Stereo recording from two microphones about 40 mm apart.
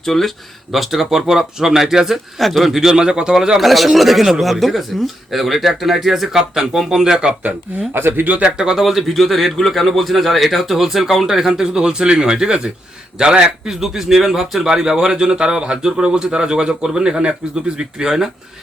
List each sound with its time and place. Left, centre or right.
0.0 s speech: centre
0.7 s speech: centre
2.9 s speech: centre
3.6 s a man's voice: centre
7.0 s speech: centre
7.9 s speech: right
8.4 s speech: centre
8.8 s a man's voice: centre